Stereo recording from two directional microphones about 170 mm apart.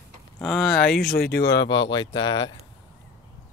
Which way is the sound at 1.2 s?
70° left (ahead or behind).